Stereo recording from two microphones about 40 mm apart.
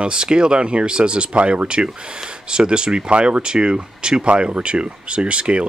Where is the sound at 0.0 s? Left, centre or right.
Right.